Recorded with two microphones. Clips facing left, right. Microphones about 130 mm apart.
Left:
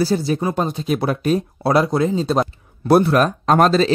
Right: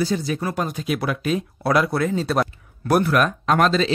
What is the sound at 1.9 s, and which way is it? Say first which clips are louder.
Speech: left 3 dB; 20° left (ahead or behind).